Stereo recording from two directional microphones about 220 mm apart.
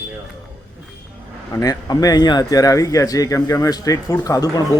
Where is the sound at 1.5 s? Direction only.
15° left (ahead or behind).